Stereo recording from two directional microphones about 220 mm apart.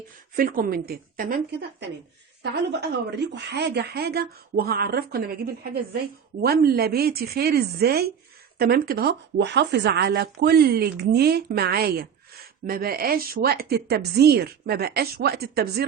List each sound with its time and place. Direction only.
0.3 s a woman's voice: 40° right (ahead or behind)
2.9 s a woman's voice: 50° right (ahead or behind)